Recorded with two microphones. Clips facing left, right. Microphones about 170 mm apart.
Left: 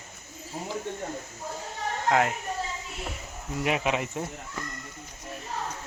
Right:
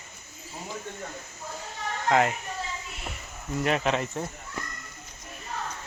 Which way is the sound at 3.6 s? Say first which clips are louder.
Right 1 dB; 10° left (ahead or behind).